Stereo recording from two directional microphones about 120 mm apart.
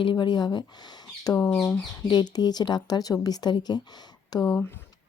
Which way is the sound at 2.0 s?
35° left (ahead or behind).